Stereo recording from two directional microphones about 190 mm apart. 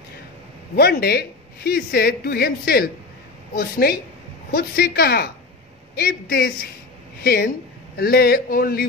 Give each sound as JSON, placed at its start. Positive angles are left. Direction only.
{"t": 0.7, "sound": "a woman's voice", "side_deg": 55}